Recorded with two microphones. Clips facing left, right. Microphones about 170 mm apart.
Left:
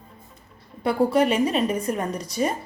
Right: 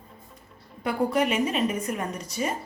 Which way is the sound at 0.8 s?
30° left (ahead or behind).